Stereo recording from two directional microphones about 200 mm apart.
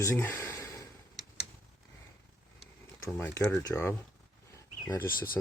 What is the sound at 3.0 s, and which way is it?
Speech, 10° left (ahead or behind).